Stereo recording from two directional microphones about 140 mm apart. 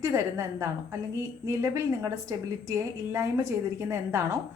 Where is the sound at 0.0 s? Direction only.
20° right (ahead or behind).